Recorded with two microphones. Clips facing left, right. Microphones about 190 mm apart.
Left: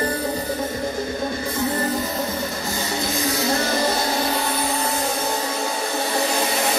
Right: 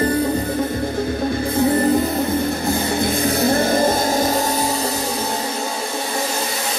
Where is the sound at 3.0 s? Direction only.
55° right (ahead or behind).